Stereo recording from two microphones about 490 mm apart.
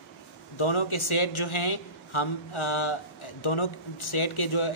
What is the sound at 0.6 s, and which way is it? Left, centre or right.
A man's voice, left.